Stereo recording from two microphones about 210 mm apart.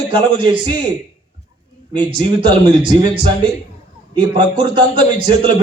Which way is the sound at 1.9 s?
20° right (ahead or behind).